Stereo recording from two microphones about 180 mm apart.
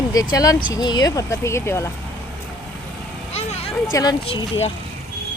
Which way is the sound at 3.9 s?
20° left (ahead or behind).